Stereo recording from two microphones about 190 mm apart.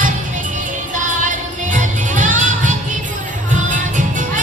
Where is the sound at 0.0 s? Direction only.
45° right (ahead or behind).